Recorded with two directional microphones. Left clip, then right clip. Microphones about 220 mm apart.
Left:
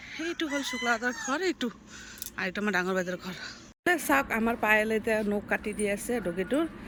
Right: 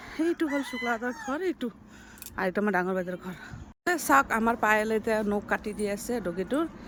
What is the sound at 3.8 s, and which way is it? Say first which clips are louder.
Speech: right 2 dB; centre (ahead or behind).